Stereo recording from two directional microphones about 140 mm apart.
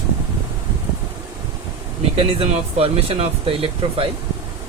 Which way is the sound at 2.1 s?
45° right (ahead or behind).